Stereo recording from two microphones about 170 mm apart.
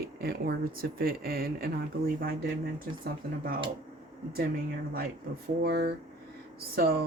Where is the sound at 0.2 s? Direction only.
65° right (ahead or behind).